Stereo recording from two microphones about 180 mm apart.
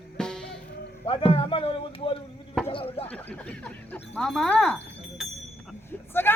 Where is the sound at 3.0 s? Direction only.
10° left (ahead or behind).